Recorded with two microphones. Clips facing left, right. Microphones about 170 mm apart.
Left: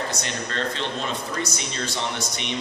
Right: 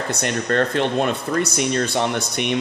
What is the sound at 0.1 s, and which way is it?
Speech, 55° right (ahead or behind).